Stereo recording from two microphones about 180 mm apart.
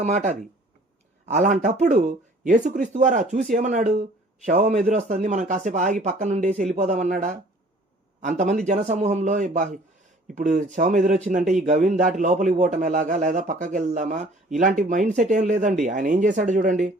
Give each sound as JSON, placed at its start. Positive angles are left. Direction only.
{"t": 0.0, "sound": "a man's voice", "side_deg": -40}